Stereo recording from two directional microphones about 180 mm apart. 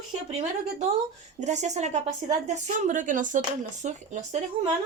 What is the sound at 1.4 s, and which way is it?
A woman's voice, 40° right (ahead or behind).